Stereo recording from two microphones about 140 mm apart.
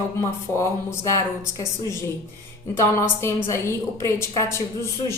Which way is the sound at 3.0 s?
20° left (ahead or behind).